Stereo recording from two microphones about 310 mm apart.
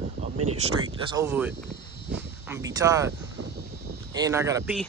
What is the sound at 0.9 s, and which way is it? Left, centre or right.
Speech, centre.